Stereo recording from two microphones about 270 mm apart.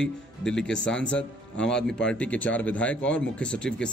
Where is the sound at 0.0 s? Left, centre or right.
Centre.